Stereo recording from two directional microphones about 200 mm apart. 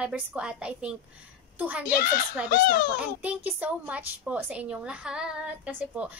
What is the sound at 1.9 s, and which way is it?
Speech, 50° left (ahead or behind).